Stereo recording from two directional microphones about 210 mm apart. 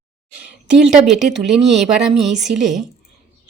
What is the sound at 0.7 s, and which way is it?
A woman's voice, 5° right (ahead or behind).